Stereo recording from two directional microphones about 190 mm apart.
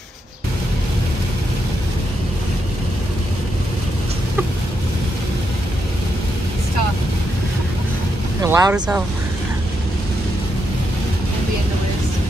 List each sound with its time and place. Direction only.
8.4 s speech: 15° right (ahead or behind)
8.7 s speech: 5° right (ahead or behind)